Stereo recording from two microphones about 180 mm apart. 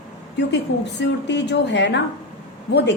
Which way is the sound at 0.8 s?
75° left (ahead or behind).